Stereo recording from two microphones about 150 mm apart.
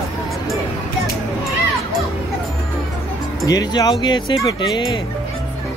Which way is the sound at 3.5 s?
25° left (ahead or behind).